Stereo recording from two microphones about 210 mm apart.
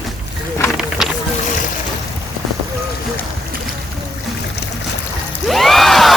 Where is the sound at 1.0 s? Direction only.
Centre (ahead or behind).